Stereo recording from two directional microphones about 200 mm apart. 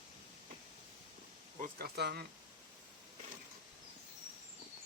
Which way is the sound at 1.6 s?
55° right (ahead or behind).